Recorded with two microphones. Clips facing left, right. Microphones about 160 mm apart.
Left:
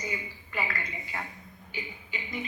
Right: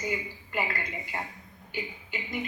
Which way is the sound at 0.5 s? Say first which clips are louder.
Right 2 dB; 20° right (ahead or behind).